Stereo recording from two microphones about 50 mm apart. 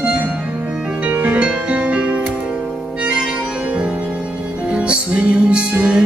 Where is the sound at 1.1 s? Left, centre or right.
Right.